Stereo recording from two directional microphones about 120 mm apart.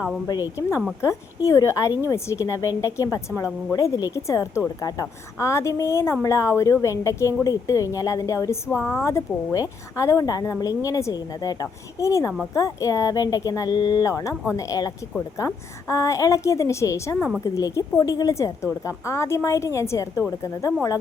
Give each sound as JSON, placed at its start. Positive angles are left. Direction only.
{"t": 1.0, "sound": "speech", "side_deg": 25}